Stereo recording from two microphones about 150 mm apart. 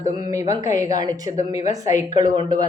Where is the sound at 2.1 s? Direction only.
30° right (ahead or behind).